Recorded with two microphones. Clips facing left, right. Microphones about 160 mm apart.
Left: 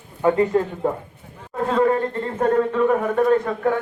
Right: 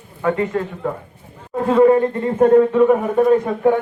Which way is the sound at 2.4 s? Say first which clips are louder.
Right 7 dB; 15° right (ahead or behind).